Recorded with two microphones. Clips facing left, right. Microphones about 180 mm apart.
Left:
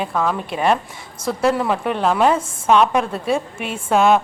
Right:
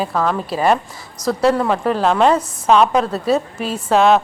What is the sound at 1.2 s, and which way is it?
Speech, 30° left (ahead or behind).